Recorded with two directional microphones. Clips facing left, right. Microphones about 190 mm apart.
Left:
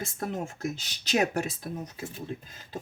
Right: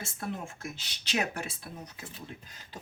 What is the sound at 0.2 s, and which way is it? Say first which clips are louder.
Speech: left 5 dB; 40° left (ahead or behind).